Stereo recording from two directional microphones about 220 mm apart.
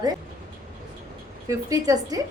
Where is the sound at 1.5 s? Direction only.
15° right (ahead or behind).